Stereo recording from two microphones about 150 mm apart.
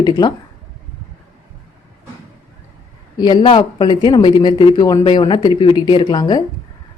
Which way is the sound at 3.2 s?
30° left (ahead or behind).